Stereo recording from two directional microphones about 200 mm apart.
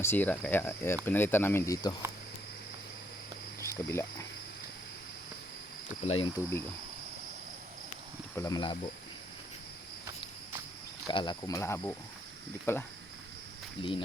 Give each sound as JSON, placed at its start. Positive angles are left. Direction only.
{"t": 0.0, "sound": "speech", "side_deg": 10}
{"t": 3.6, "sound": "speech", "side_deg": 15}
{"t": 6.1, "sound": "speech", "side_deg": 20}
{"t": 8.4, "sound": "speech", "side_deg": 20}
{"t": 11.0, "sound": "speech", "side_deg": 20}
{"t": 13.8, "sound": "speech", "side_deg": 25}